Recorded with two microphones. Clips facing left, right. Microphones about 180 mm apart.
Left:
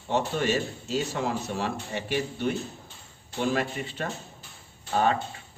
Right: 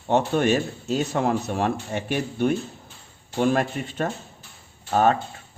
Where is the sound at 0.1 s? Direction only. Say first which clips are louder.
Right 6 dB; 55° right (ahead or behind).